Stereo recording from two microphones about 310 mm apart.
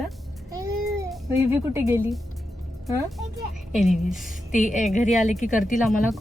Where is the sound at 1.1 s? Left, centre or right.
Centre.